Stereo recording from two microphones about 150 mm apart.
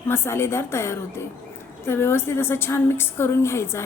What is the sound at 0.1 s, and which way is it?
A woman's voice, 15° left (ahead or behind).